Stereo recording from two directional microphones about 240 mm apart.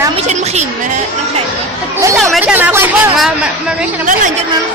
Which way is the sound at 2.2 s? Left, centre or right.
Centre.